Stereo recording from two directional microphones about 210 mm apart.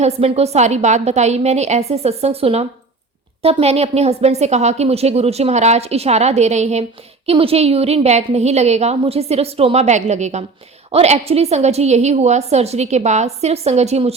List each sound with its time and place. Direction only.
0.0 s a woman's voice: 30° right (ahead or behind)